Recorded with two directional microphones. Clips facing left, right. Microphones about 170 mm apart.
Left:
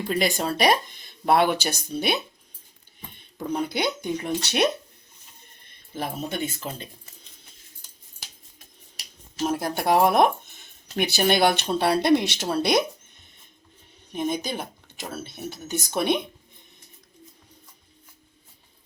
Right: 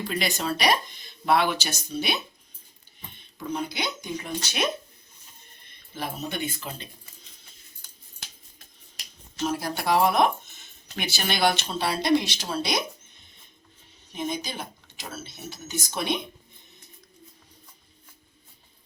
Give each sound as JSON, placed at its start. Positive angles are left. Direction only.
{"t": 0.1, "sound": "speech", "side_deg": 50}
{"t": 3.3, "sound": "speech", "side_deg": 55}
{"t": 6.3, "sound": "speech", "side_deg": 45}
{"t": 9.5, "sound": "speech", "side_deg": 50}
{"t": 14.1, "sound": "speech", "side_deg": 55}